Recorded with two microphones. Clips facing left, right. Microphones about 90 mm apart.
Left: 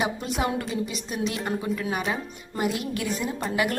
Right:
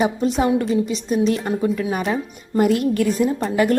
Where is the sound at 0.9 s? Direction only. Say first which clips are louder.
Right 11 dB; 30° right (ahead or behind).